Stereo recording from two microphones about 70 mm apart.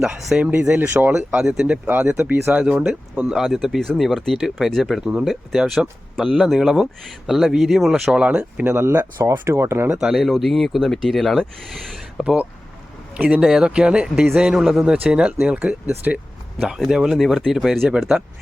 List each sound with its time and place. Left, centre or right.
0.0 s speech: centre
0.5 s speech: right
1.4 s speech: centre
8.0 s speech: centre
8.7 s speech: right
10.0 s speech: centre
12.2 s speech: centre